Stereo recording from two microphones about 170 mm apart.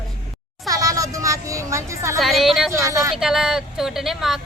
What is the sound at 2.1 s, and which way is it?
Speech, centre (ahead or behind).